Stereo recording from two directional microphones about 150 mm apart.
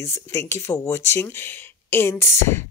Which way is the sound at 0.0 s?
20° left (ahead or behind).